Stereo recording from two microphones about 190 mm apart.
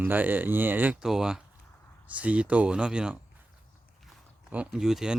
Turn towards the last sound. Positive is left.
turn(degrees=0)  # may be behind; listen again after turning